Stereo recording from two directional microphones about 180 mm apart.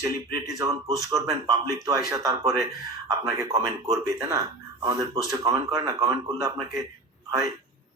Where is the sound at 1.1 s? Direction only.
20° right (ahead or behind).